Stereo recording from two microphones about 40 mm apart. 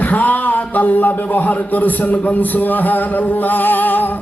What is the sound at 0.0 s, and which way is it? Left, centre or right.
A man's voice, left.